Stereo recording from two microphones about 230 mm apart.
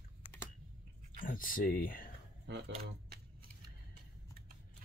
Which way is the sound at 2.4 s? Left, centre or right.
Right.